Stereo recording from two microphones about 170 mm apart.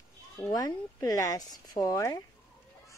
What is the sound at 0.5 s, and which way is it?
Speech, 25° left (ahead or behind).